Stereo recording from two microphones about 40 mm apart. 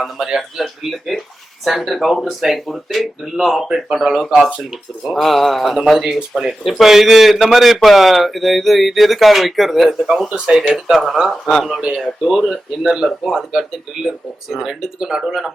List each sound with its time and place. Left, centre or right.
0.0 s speech: centre
3.7 s speech: centre
10.3 s speech: centre
10.9 s speech: centre